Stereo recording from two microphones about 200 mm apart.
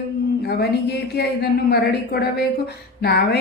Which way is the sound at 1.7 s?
55° left (ahead or behind).